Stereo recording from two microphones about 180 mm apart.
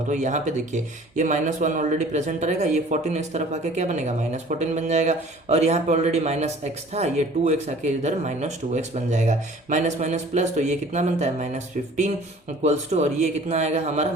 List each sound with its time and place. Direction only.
0.1 s speech: 40° right (ahead or behind)